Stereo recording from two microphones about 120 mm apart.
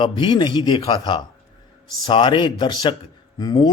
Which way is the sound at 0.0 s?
40° left (ahead or behind).